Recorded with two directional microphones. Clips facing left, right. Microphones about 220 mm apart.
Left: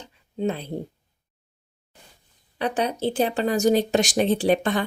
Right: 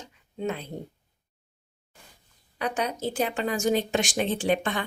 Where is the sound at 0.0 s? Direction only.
30° left (ahead or behind).